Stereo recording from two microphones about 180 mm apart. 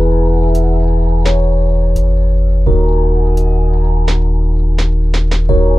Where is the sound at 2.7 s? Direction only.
20° left (ahead or behind).